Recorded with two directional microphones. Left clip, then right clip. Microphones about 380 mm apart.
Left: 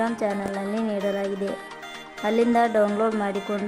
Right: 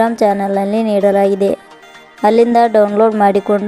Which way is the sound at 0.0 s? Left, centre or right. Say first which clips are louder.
Right 13 dB; centre.